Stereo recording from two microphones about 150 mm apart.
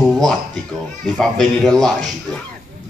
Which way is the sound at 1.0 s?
Centre (ahead or behind).